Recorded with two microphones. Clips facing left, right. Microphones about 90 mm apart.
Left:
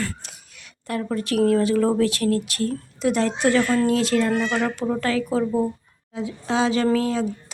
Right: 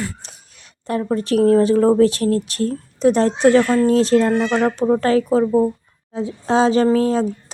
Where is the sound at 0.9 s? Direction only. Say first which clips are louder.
Right 5 dB; 30° right (ahead or behind).